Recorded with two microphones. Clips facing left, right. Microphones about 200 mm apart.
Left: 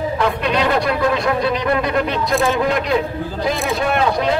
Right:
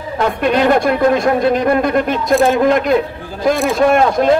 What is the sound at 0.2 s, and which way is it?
Speech, 50° right (ahead or behind).